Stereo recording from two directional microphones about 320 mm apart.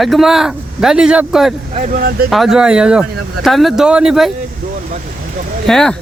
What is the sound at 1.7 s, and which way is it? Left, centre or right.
Speech, right.